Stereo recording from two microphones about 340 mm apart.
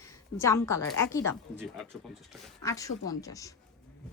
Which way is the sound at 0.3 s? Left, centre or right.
Centre.